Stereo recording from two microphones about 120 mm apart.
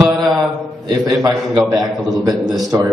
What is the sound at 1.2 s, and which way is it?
Speech, 30° right (ahead or behind).